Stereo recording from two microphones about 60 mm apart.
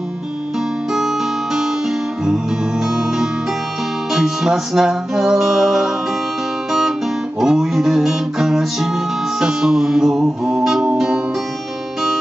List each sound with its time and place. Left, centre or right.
0.9 s music: centre
2.8 s music: centre
7.3 s music: centre